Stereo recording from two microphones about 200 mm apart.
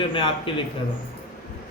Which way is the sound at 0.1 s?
25° left (ahead or behind).